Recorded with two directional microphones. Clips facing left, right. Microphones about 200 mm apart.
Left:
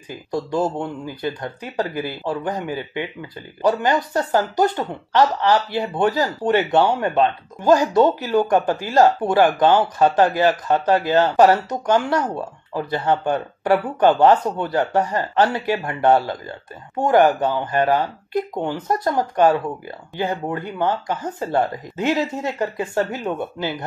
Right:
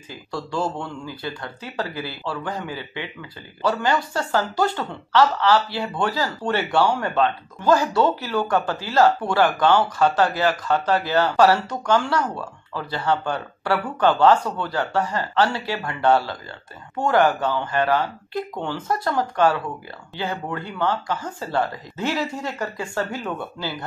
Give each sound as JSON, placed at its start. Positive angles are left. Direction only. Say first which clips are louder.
{"t": 0.1, "sound": "speech", "louder": "left 5 dB", "side_deg": 20}